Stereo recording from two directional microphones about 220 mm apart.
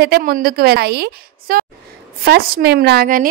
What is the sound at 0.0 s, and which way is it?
A woman's voice, 45° right (ahead or behind).